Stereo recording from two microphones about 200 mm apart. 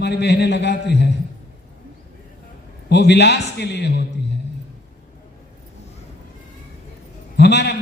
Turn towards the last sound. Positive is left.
turn(degrees=55)  # may be behind; listen again after turning